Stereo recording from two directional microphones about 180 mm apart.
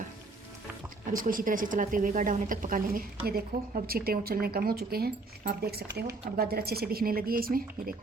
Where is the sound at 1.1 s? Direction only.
50° right (ahead or behind).